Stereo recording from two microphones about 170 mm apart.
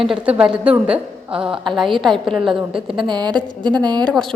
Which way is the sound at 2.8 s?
30° right (ahead or behind).